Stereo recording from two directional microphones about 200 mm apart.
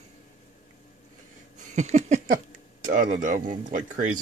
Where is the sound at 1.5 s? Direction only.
35° right (ahead or behind).